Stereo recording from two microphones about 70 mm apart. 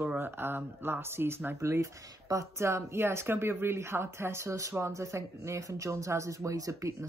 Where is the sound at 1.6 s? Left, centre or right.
Right.